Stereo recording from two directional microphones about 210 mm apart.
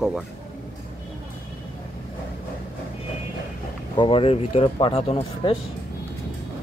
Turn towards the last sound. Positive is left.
turn(degrees=25)  # may be behind; listen again after turning